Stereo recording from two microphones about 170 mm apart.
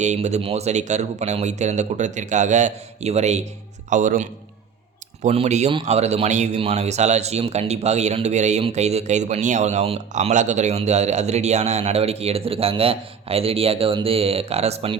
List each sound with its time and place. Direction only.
0.0 s speech: 45° right (ahead or behind)